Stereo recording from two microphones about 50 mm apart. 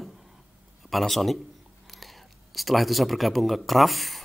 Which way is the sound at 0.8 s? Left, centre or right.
Centre.